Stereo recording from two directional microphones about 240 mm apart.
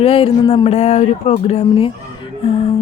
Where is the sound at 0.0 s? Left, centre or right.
Left.